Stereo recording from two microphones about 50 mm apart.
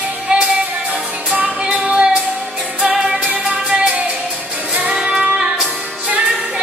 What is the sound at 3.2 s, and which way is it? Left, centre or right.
Music, right.